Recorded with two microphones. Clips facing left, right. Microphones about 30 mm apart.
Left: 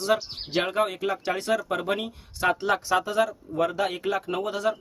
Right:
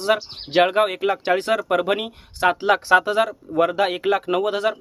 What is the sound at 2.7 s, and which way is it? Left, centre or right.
Speech, right.